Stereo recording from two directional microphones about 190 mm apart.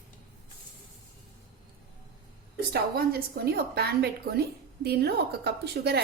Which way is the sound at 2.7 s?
55° right (ahead or behind).